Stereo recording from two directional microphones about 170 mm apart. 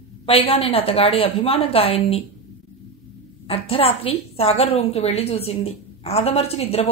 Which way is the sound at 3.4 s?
35° left (ahead or behind).